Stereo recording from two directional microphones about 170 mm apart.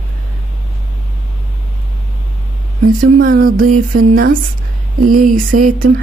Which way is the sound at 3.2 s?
55° right (ahead or behind).